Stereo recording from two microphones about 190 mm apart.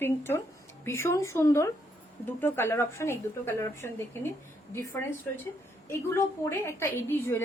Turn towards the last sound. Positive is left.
turn(degrees=10)  # may be behind; listen again after turning